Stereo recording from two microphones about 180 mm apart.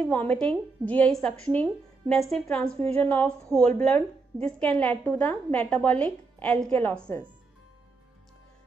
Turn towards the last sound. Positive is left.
turn(degrees=10)  # may be behind; listen again after turning